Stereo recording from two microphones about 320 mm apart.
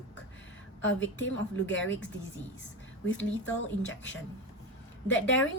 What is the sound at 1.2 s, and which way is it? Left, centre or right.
Speech, left.